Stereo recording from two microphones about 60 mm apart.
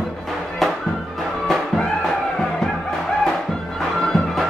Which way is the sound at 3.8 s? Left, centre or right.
Centre.